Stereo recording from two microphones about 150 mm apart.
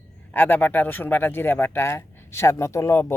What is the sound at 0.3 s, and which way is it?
Speech, 10° left (ahead or behind).